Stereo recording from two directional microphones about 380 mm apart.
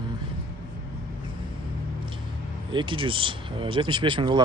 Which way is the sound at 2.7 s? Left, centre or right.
Centre.